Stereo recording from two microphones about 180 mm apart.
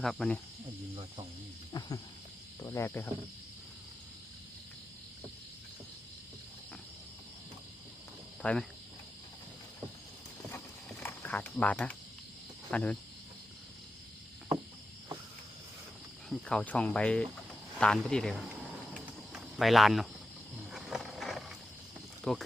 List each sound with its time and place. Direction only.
0.0 s speech: centre (ahead or behind)
2.6 s cricket: 15° left (ahead or behind)
8.4 s speech: 5° left (ahead or behind)
11.0 s speech: 10° left (ahead or behind)
12.7 s cricket: 5° left (ahead or behind)
16.3 s cricket: 5° left (ahead or behind)
17.7 s speech: 5° left (ahead or behind)
18.9 s cricket: centre (ahead or behind)
20.7 s wild animals: centre (ahead or behind)
22.2 s speech: centre (ahead or behind)